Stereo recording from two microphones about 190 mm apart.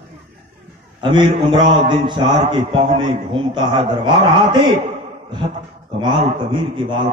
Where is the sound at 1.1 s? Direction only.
25° right (ahead or behind).